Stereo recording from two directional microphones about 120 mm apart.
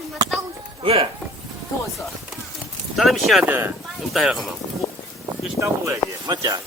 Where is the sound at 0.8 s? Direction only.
50° right (ahead or behind).